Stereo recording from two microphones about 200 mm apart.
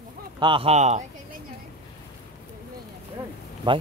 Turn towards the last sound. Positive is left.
turn(degrees=-25)  # may be behind; listen again after turning